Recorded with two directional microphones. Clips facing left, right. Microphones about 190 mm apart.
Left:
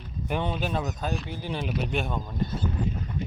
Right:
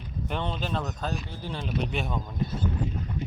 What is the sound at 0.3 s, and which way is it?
Speech, 10° left (ahead or behind).